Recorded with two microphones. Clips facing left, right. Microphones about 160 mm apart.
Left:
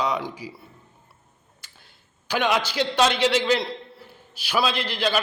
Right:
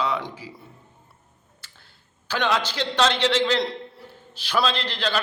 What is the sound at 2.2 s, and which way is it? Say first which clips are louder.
A man's voice: left 1 dB; 10° left (ahead or behind).